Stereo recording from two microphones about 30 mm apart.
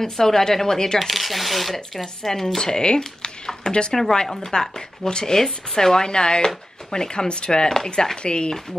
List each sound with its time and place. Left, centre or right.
0.0 s a woman's voice: centre
0.9 s speech: centre
2.2 s a woman's voice: centre
2.6 s speech: left
7.6 s a woman's voice: centre
8.2 s speech: left